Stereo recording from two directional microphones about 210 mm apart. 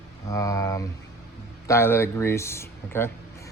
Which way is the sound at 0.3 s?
15° left (ahead or behind).